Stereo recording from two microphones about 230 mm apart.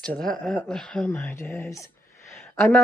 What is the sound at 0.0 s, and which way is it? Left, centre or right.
Speech, centre.